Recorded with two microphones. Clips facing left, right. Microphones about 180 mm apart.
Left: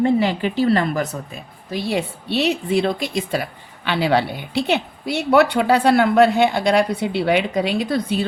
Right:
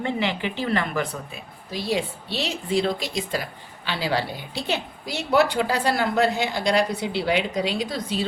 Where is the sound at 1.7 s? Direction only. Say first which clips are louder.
Left 3 dB; 60° left (ahead or behind).